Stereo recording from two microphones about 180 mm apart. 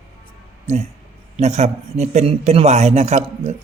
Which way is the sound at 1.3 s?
40° right (ahead or behind).